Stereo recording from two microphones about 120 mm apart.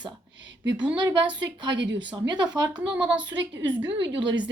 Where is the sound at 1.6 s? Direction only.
40° right (ahead or behind).